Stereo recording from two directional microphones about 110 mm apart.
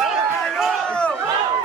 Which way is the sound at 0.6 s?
10° left (ahead or behind).